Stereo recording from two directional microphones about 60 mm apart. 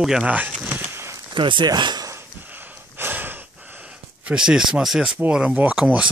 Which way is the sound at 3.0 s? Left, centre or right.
Right.